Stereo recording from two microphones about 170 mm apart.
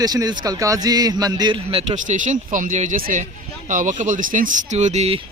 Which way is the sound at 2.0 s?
50° right (ahead or behind).